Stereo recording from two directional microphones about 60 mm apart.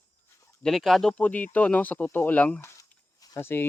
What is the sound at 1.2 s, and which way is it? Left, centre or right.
Speech, left.